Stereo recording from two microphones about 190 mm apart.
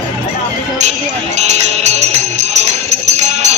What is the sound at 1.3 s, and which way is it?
Music, 35° right (ahead or behind).